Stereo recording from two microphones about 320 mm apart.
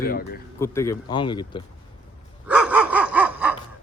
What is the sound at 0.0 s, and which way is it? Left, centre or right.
Speech, left.